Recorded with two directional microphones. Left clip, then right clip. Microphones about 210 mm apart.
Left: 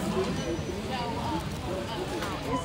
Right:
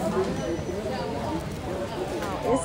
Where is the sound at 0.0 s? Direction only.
10° left (ahead or behind).